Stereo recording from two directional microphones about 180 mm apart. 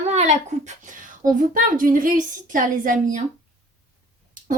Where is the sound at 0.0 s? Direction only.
40° right (ahead or behind).